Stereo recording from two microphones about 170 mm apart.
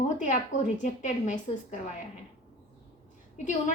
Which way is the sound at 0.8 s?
45° left (ahead or behind).